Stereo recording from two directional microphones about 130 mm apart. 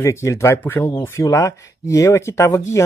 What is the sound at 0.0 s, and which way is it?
Speech, 20° left (ahead or behind).